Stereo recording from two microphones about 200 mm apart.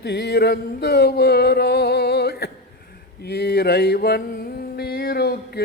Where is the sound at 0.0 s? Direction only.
55° left (ahead or behind).